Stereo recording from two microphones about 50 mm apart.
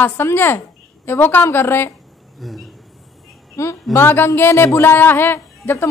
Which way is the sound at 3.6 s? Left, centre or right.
Left.